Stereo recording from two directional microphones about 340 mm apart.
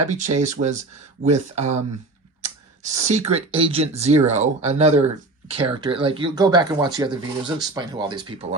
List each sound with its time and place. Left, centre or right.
0.1 s speech: right